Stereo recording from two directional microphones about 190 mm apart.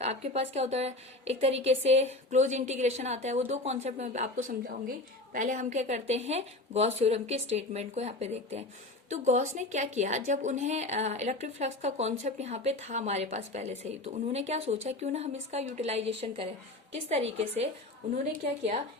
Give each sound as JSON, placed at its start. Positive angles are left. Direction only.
{"t": 0.0, "sound": "a woman's voice", "side_deg": -35}
{"t": 18.4, "sound": "speech", "side_deg": -45}